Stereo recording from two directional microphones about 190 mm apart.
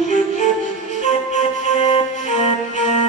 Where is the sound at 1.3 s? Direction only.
35° left (ahead or behind).